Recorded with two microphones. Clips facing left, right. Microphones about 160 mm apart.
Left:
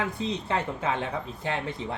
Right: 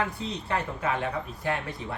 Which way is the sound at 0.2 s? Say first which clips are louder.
Left 2 dB; 20° left (ahead or behind).